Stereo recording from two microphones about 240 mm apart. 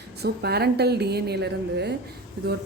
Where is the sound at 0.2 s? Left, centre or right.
Right.